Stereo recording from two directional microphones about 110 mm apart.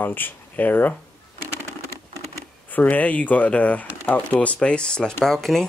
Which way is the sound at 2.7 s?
15° left (ahead or behind).